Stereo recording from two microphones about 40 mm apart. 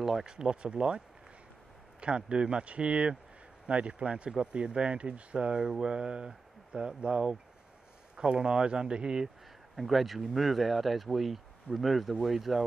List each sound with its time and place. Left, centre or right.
0.0 s speech: centre
0.3 s speech: right
9.8 s speech: centre